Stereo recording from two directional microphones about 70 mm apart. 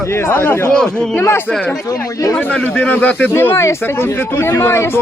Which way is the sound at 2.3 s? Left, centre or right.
Left.